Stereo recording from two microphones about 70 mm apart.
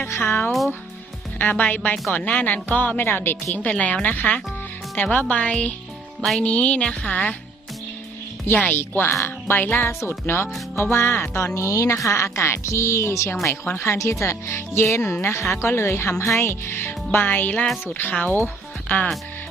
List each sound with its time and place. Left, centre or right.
0.0 s speech: left
3.7 s speech: centre
8.5 s speech: centre
8.8 s speech: left
11.4 s speech: left